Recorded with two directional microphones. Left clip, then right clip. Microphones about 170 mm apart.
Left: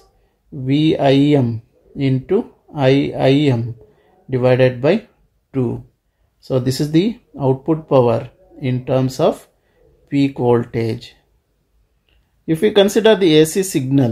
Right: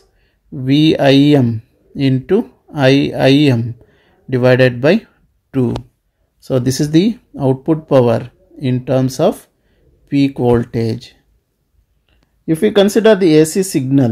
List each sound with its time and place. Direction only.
0.7 s speech: 50° right (ahead or behind)
6.4 s speech: 50° right (ahead or behind)